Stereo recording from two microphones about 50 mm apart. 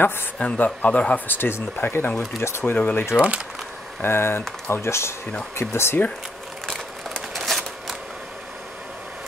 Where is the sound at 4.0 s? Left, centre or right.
Left.